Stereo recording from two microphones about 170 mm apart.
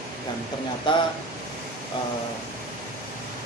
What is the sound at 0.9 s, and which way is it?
Speech, 30° left (ahead or behind).